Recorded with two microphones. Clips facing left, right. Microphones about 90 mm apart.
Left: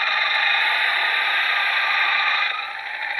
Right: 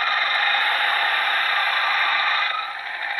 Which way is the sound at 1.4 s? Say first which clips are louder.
Right 1 dB; 40° right (ahead or behind).